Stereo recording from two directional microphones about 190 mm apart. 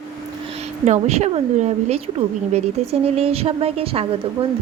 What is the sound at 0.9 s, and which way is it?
Speech, 35° right (ahead or behind).